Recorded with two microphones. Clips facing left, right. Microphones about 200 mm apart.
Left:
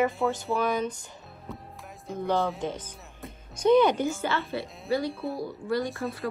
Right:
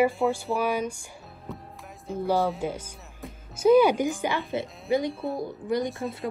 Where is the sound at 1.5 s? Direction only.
Centre (ahead or behind).